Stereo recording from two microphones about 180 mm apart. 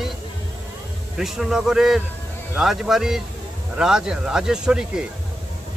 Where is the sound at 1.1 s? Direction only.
Centre (ahead or behind).